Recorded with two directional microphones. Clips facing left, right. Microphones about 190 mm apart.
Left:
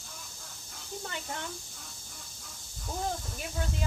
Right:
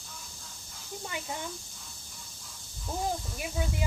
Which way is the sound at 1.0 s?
10° right (ahead or behind).